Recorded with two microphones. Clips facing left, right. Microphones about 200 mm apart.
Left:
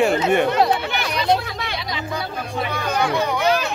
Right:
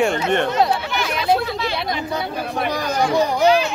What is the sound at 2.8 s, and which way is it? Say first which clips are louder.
Chatter: even; 60° left (ahead or behind).